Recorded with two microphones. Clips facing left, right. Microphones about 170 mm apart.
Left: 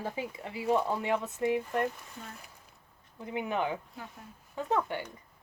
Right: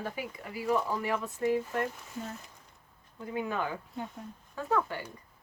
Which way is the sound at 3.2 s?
20° left (ahead or behind).